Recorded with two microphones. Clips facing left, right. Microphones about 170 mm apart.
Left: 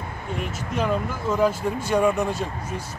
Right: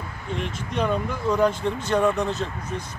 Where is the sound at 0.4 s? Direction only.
5° left (ahead or behind).